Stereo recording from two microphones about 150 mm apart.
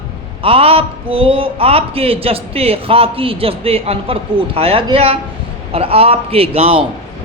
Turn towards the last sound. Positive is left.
turn(degrees=-40)  # may be behind; listen again after turning